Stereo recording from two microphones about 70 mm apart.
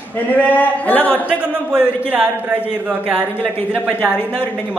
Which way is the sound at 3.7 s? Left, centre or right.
Right.